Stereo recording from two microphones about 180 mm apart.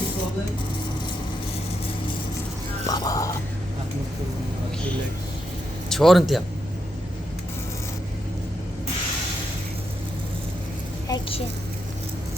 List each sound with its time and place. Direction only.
2.8 s speech: 20° left (ahead or behind)
5.9 s speech: centre (ahead or behind)
11.1 s a sound: 30° left (ahead or behind)